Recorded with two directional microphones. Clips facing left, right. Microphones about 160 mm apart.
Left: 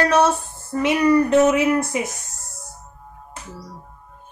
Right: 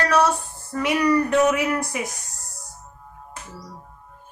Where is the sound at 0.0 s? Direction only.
25° left (ahead or behind).